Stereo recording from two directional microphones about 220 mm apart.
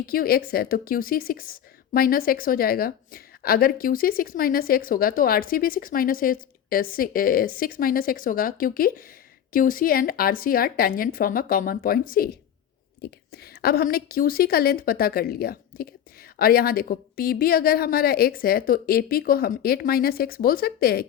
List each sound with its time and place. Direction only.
0.0 s a woman's voice: 40° left (ahead or behind)